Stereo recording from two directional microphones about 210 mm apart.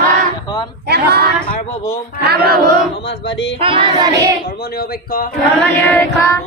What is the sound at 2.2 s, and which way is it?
Speech, 50° right (ahead or behind).